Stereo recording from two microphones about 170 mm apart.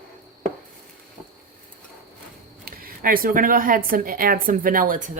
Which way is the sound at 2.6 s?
60° right (ahead or behind).